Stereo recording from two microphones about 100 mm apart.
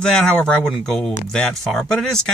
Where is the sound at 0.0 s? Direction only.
10° left (ahead or behind).